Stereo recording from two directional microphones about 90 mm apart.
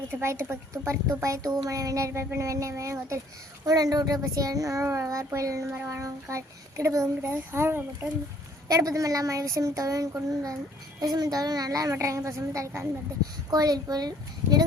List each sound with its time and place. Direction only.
0.1 s a child's voice: 30° right (ahead or behind)
8.6 s a child's voice: 40° right (ahead or behind)